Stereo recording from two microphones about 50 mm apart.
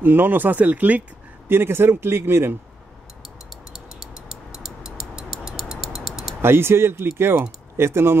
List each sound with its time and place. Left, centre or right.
0.0 s speech: right
1.5 s speech: right
3.7 s a sound: centre
6.4 s speech: right